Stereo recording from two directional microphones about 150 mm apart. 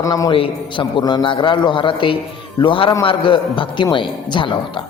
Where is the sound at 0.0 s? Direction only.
25° left (ahead or behind).